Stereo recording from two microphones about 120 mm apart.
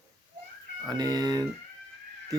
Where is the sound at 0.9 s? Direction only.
35° right (ahead or behind).